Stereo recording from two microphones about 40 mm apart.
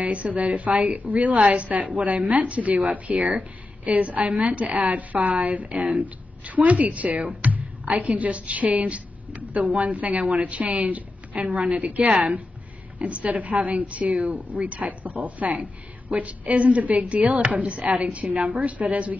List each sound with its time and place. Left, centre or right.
0.0 s a woman's voice: right